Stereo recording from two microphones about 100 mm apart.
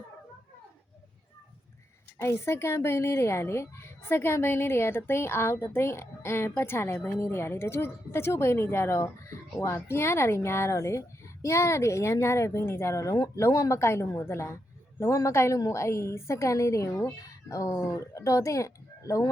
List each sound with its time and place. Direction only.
2.2 s a woman's voice: 25° left (ahead or behind)